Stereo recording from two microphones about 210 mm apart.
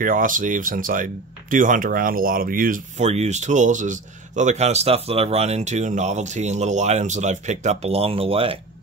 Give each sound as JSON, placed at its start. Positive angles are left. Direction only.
{"t": 0.0, "sound": "speech", "side_deg": -40}